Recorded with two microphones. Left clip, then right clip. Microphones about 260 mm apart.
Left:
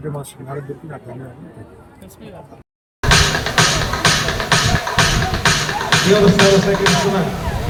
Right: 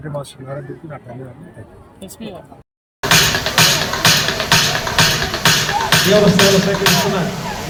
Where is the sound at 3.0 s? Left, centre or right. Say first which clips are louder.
Right 1 dB; right.